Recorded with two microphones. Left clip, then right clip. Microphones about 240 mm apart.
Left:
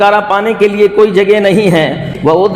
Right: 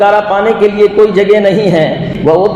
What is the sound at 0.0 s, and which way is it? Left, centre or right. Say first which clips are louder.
A man's voice: right 1 dB; left.